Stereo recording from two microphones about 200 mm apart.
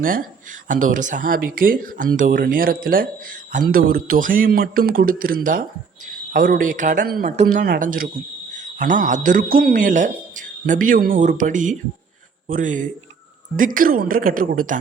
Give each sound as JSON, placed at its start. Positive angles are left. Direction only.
{"t": 0.0, "sound": "speech", "side_deg": -45}
{"t": 7.4, "sound": "cricket", "side_deg": -50}
{"t": 13.6, "sound": "speech", "side_deg": -45}